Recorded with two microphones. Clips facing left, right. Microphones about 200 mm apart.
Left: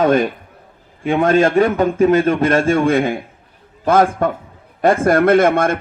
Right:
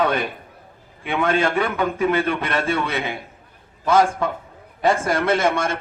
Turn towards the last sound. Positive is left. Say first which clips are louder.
# left 7 dB
turn(degrees=55)  # may be behind; listen again after turning